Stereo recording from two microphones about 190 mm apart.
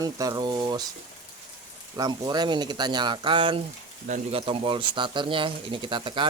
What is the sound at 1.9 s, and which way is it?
Speech, 20° right (ahead or behind).